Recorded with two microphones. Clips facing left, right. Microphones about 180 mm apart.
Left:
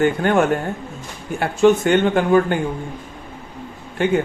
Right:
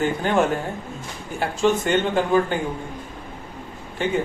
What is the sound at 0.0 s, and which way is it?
Speech, 60° left (ahead or behind).